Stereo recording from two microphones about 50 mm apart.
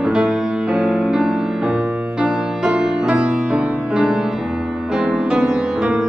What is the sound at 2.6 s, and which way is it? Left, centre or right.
Music, centre.